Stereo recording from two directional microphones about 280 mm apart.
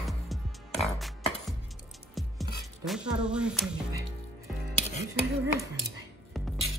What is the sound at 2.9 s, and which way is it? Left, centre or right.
Music, centre.